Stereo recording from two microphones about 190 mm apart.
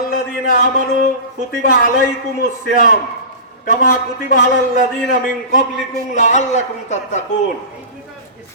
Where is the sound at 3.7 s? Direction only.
45° left (ahead or behind).